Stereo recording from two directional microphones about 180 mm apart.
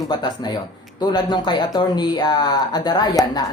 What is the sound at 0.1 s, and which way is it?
Speech, 25° left (ahead or behind).